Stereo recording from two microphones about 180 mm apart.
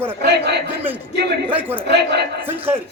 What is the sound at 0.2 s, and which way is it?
Speech, 65° right (ahead or behind).